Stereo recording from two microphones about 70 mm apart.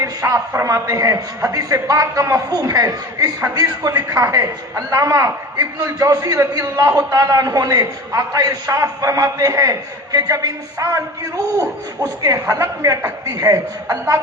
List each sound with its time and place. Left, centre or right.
0.0 s a man's voice: right
0.3 s a man's voice: right
0.7 s a man's voice: right
2.5 s a man's voice: right
4.1 s a man's voice: right
12.3 s a man's voice: right
13.2 s a man's voice: right
13.9 s a man's voice: right